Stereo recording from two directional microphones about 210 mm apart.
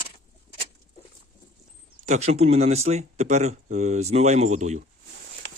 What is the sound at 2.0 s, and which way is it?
Speech, 30° right (ahead or behind).